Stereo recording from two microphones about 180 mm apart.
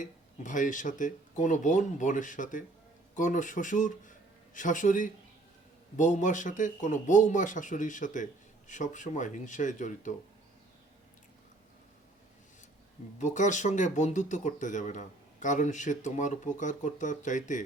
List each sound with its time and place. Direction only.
0.0 s speech: 45° left (ahead or behind)
13.1 s speech: 45° left (ahead or behind)